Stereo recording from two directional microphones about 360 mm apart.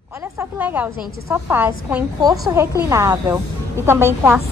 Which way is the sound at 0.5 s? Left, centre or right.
Centre.